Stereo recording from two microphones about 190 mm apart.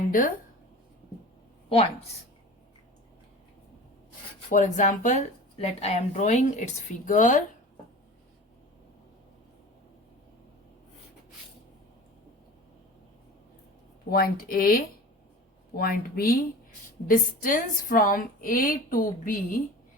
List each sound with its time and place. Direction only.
4.4 s speech: 40° left (ahead or behind)
14.1 s a woman's voice: 50° left (ahead or behind)